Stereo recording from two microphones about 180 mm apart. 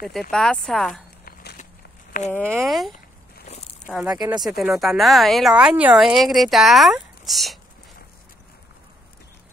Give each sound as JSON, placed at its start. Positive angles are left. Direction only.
{"t": 0.0, "sound": "speech", "side_deg": 0}
{"t": 1.2, "sound": "walk", "side_deg": 65}
{"t": 2.1, "sound": "speech", "side_deg": 50}
{"t": 2.6, "sound": "speech", "side_deg": 0}